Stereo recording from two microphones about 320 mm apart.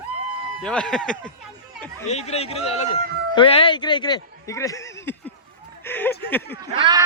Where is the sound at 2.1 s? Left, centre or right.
Centre.